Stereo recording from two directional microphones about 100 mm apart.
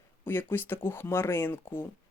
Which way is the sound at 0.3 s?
20° left (ahead or behind).